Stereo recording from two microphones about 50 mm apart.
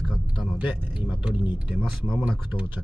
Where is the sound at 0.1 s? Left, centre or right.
Centre.